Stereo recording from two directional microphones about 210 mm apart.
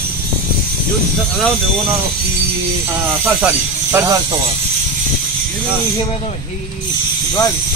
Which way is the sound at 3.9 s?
15° right (ahead or behind).